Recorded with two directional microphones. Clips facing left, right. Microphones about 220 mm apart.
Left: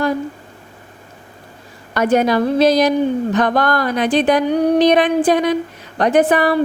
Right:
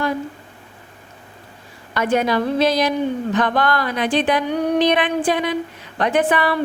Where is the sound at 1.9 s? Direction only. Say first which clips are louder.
Left 4 dB; 45° left (ahead or behind).